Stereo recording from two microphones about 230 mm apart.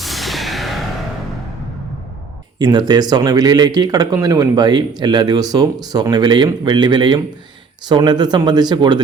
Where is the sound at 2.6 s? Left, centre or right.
Centre.